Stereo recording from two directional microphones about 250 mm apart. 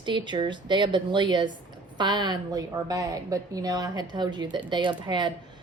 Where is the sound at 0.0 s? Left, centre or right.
Centre.